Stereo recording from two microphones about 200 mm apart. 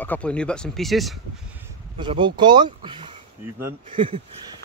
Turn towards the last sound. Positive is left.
turn(degrees=-25)  # may be behind; listen again after turning